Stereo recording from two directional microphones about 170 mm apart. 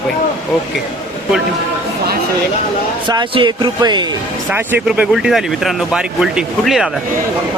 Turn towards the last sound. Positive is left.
turn(degrees=0)  # may be behind; listen again after turning